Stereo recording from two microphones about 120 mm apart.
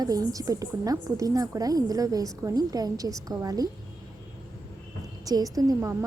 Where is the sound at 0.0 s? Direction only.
30° right (ahead or behind).